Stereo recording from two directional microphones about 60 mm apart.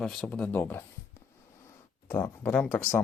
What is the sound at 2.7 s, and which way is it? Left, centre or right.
Speech, left.